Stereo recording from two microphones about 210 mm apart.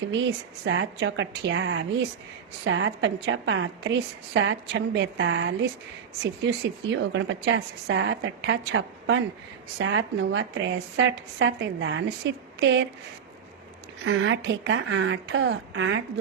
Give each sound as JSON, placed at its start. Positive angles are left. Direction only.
{"t": 0.1, "sound": "speech", "side_deg": -60}
{"t": 6.9, "sound": "speech", "side_deg": -60}
{"t": 14.0, "sound": "speech", "side_deg": -60}